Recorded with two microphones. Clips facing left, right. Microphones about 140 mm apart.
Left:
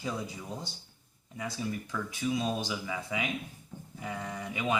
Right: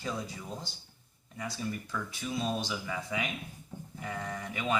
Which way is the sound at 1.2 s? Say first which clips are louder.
Left 1 dB; 10° left (ahead or behind).